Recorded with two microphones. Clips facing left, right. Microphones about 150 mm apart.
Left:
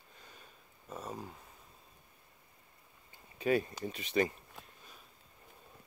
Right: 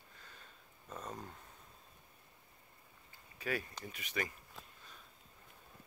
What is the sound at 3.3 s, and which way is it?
Speech, 25° left (ahead or behind).